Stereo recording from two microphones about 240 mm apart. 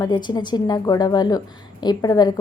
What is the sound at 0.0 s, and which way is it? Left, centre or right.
A woman's voice, centre.